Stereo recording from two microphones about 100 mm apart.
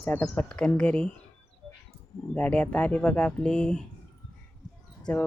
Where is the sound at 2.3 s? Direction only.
15° left (ahead or behind).